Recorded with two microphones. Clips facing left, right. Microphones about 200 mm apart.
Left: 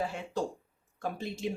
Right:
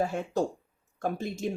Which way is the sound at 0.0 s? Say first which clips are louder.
Right 5 dB; 45° right (ahead or behind).